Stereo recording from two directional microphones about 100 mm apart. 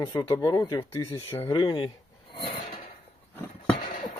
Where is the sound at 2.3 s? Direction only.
50° left (ahead or behind).